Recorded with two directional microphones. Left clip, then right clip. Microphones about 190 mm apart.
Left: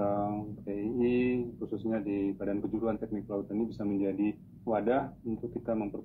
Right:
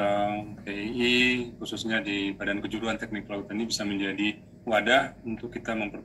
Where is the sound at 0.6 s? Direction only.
30° right (ahead or behind).